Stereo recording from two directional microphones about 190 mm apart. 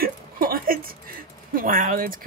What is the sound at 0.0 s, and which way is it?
Speech, 50° right (ahead or behind).